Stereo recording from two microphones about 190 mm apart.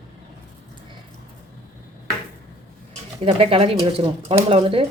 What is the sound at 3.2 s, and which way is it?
Speech, 30° right (ahead or behind).